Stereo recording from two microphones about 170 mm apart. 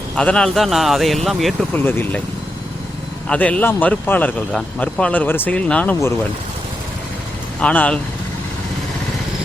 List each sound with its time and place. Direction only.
0.2 s a man's voice: 5° left (ahead or behind)
1.7 s speech: 10° left (ahead or behind)
3.2 s speech: 10° left (ahead or behind)
7.6 s speech: 10° left (ahead or behind)